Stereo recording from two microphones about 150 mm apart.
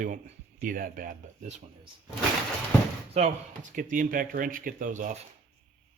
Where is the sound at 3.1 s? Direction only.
45° right (ahead or behind).